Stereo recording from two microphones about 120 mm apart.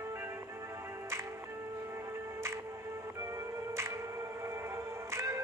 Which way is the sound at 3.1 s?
25° right (ahead or behind).